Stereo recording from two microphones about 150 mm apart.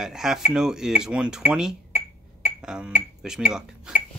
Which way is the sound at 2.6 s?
5° right (ahead or behind).